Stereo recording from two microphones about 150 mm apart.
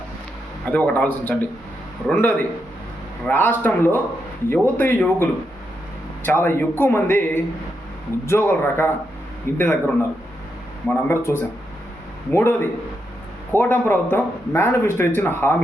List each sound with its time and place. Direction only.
0.7 s speech: 10° left (ahead or behind)
3.2 s speech: 15° left (ahead or behind)